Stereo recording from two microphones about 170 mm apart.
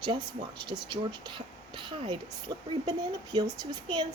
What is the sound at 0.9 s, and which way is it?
A child's voice, 25° right (ahead or behind).